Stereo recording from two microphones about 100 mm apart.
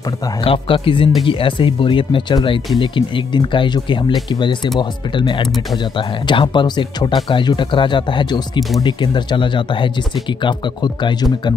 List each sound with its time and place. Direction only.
0.4 s speech: 65° left (ahead or behind); by 11.2 s 50° left (ahead or behind)